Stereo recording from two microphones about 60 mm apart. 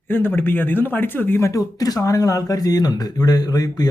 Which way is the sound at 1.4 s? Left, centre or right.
Left.